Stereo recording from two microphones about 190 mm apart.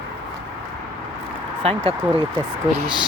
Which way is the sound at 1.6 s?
30° right (ahead or behind).